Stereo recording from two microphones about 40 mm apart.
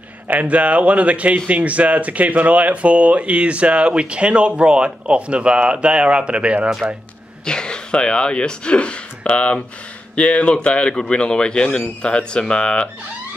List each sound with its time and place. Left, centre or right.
0.3 s speech: right
7.4 s speech: left